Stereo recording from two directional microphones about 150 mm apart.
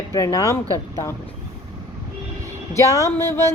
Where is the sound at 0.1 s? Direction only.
25° left (ahead or behind).